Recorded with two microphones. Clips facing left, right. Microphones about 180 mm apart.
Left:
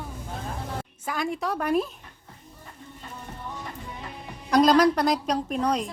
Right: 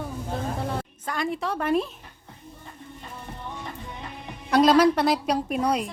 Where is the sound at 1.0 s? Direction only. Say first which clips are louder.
Left 1 dB; centre (ahead or behind).